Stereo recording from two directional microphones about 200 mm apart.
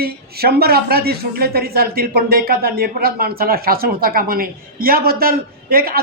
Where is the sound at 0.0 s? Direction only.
50° right (ahead or behind).